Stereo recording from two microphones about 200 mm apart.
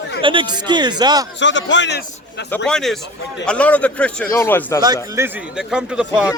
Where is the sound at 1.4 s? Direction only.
65° left (ahead or behind).